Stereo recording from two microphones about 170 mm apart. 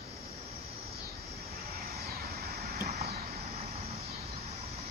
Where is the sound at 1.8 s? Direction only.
65° right (ahead or behind).